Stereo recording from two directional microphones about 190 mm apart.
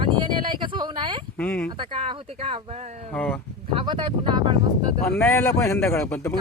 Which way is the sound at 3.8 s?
25° right (ahead or behind).